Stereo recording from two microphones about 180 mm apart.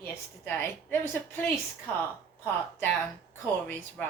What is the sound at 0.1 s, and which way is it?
Speech, 10° left (ahead or behind).